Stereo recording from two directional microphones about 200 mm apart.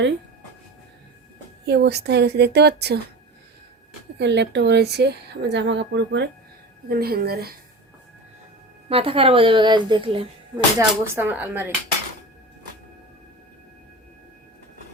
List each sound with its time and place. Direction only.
1.6 s speech: 55° right (ahead or behind)
4.2 s speech: 60° right (ahead or behind)
6.8 s a woman's voice: 50° right (ahead or behind)
8.9 s a woman's voice: 30° right (ahead or behind)
10.8 s speech: 15° right (ahead or behind)